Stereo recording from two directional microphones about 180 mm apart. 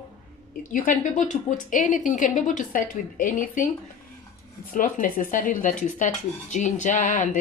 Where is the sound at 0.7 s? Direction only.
45° left (ahead or behind).